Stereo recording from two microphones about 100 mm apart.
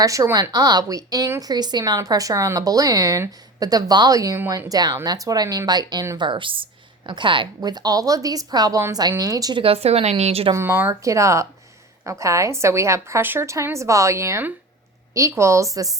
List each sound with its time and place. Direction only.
0.0 s a woman's voice: 35° right (ahead or behind)
6.1 s a woman's voice: 55° right (ahead or behind); by 9.6 s 40° right (ahead or behind)
9.6 s speech: 75° right (ahead or behind)
10.5 s a woman's voice: 25° right (ahead or behind)